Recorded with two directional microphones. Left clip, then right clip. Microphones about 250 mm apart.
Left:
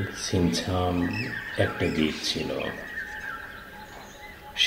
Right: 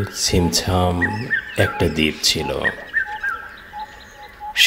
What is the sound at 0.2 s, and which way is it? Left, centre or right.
A man's voice, right.